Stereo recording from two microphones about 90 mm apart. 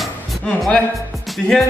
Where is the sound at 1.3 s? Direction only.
Centre (ahead or behind).